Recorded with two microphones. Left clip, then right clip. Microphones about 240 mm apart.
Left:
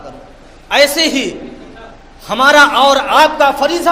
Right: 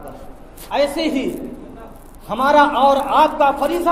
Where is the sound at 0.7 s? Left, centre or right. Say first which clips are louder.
Left 8 dB; left.